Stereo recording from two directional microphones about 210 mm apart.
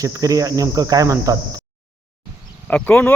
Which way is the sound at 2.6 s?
5° left (ahead or behind).